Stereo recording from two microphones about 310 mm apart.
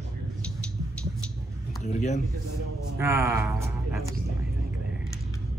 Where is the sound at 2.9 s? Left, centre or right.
Centre.